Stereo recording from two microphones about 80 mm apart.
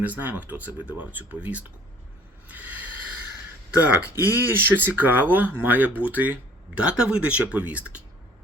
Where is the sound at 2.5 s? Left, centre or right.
Centre.